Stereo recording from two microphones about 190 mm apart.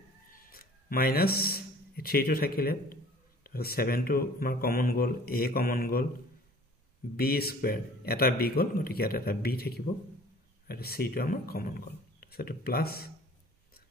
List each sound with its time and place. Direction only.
0.5 s a man's voice: 50° left (ahead or behind)
7.2 s a man's voice: 55° left (ahead or behind)